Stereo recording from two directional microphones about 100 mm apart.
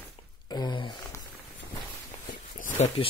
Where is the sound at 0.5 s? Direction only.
45° left (ahead or behind).